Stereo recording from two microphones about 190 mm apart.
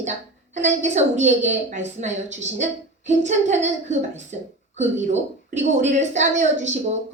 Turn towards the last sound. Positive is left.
turn(degrees=-35)  # may be behind; listen again after turning